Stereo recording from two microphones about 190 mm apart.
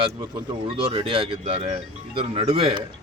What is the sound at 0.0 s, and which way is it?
Speech, 25° right (ahead or behind).